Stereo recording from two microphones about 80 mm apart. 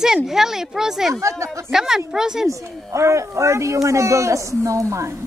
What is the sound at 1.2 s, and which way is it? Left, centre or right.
Speech, right.